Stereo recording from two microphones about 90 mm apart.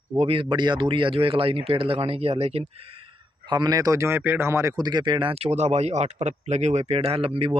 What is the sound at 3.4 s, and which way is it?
Speech, 55° right (ahead or behind).